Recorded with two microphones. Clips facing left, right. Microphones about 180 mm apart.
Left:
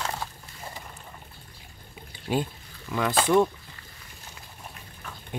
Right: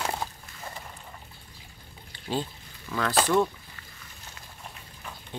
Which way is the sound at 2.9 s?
15° left (ahead or behind).